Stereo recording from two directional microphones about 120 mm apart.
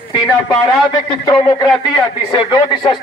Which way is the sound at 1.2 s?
35° left (ahead or behind).